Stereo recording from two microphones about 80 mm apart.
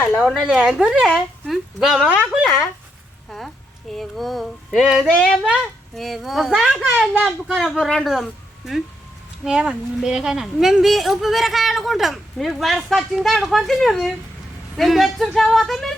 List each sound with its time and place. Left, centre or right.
0.4 s a woman's voice: centre
3.9 s a woman's voice: centre
7.1 s speech: right
7.6 s a woman's voice: centre